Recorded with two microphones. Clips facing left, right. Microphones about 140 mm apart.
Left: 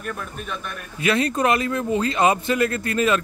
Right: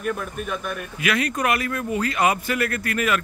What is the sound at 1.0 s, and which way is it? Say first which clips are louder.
Speech: left 3 dB; 30° left (ahead or behind).